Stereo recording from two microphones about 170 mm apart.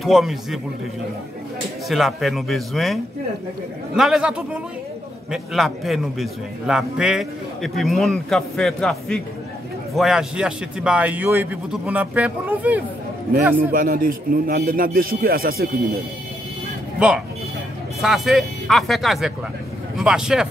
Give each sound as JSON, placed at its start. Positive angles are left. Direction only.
{"t": 0.0, "sound": "a man's voice", "side_deg": 0}
{"t": 1.9, "sound": "a man's voice", "side_deg": 0}
{"t": 13.6, "sound": "speech", "side_deg": -55}
{"t": 18.0, "sound": "a man's voice", "side_deg": 0}